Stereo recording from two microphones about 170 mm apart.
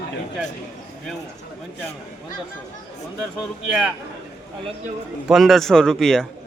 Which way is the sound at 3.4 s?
Centre (ahead or behind).